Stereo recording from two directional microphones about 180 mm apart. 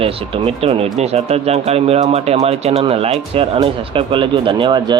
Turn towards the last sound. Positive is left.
turn(degrees=-25)  # may be behind; listen again after turning